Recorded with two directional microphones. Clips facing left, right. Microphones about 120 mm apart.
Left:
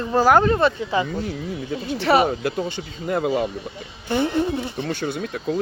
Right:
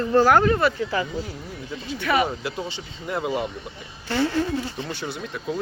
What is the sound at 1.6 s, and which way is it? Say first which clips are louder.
Speech: left 4 dB; 55° left (ahead or behind).